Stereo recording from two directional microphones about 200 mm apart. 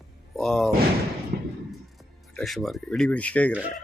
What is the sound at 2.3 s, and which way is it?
Speech, centre (ahead or behind).